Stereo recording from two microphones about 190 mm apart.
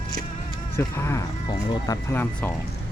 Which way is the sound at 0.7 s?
15° left (ahead or behind).